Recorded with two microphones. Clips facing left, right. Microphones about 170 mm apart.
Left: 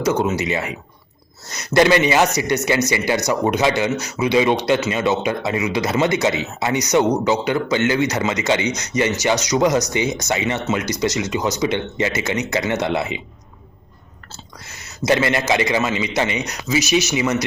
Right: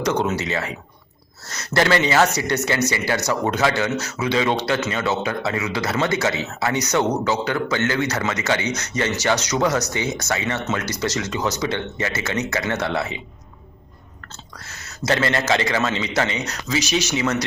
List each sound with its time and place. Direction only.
0.0 s speech: 5° left (ahead or behind)
14.6 s speech: 15° left (ahead or behind)